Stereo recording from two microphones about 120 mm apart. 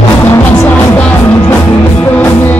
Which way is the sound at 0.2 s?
20° left (ahead or behind).